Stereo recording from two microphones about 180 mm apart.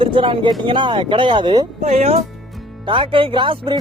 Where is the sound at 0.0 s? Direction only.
25° right (ahead or behind).